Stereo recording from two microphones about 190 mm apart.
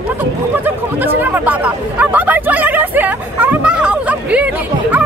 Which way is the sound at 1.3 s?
10° right (ahead or behind).